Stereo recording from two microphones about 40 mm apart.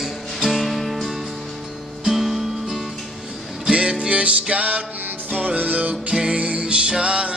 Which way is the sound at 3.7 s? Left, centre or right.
Right.